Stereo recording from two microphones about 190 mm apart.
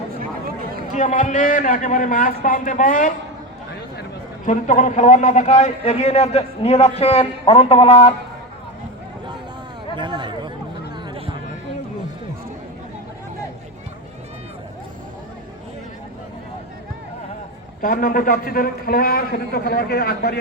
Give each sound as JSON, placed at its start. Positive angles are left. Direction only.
{"t": 0.2, "sound": "a sound", "side_deg": -50}
{"t": 0.9, "sound": "a man's voice", "side_deg": 40}
{"t": 4.4, "sound": "a man's voice", "side_deg": 40}
{"t": 9.9, "sound": "chatter", "side_deg": -25}
{"t": 17.8, "sound": "a man's voice", "side_deg": 45}